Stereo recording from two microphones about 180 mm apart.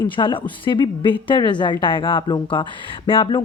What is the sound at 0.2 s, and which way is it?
A woman's voice, 25° left (ahead or behind).